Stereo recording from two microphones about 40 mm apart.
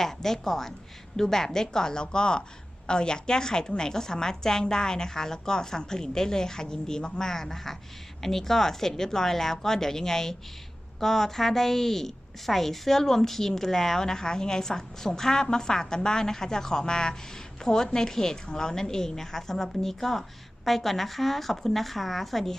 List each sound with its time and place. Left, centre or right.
0.0 s a woman's voice: centre